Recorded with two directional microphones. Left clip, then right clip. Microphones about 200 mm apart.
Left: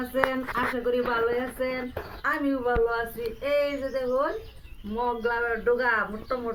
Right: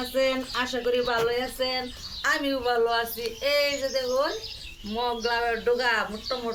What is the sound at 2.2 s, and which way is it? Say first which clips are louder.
Speech: right 1 dB; 20° right (ahead or behind).